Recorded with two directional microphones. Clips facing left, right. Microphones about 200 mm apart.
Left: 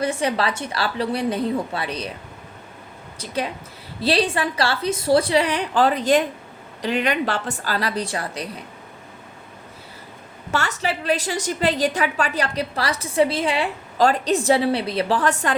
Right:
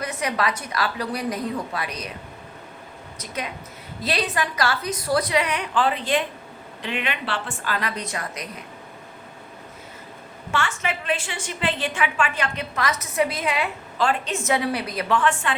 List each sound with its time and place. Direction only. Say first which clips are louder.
0.0 s a woman's voice: left 4 dB; 30° left (ahead or behind)
3.2 s a woman's voice: left 6 dB; 30° left (ahead or behind)
10.5 s a woman's voice: left 2 dB; 40° left (ahead or behind)